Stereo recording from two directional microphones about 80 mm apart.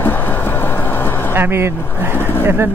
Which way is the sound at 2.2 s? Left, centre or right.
Left.